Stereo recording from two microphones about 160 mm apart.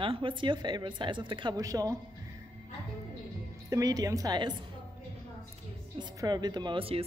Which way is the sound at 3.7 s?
20° right (ahead or behind).